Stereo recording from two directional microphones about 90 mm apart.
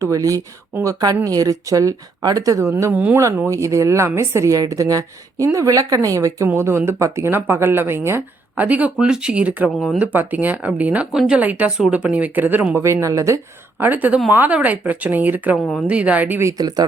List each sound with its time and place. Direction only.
0.0 s a woman's voice: 40° right (ahead or behind)
2.9 s speech: 20° right (ahead or behind)
3.4 s a woman's voice: 35° right (ahead or behind); by 9.6 s 15° right (ahead or behind)
9.7 s speech: 5° left (ahead or behind)
10.0 s a woman's voice: 20° right (ahead or behind); by 13.4 s 35° right (ahead or behind)
13.7 s a woman's voice: 20° right (ahead or behind)
16.4 s speech: 35° right (ahead or behind)